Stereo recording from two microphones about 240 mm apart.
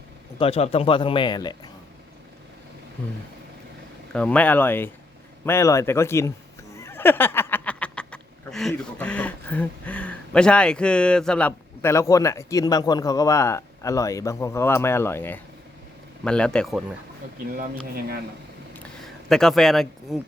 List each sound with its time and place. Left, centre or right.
0.3 s speech: left
4.1 s speech: centre
17.4 s speech: right
18.8 s a sound: centre